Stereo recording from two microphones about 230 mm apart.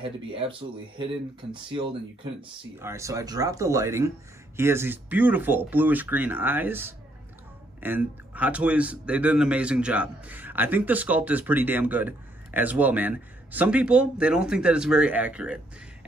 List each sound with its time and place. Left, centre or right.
0.0 s a man's voice: right; by 15.6 s centre